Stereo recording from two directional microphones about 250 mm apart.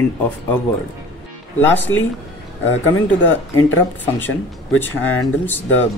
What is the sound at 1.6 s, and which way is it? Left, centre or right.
Speech, centre.